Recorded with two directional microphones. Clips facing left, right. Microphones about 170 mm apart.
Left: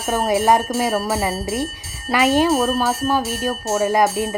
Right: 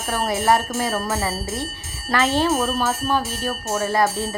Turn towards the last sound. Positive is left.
turn(degrees=15)  # may be behind; listen again after turning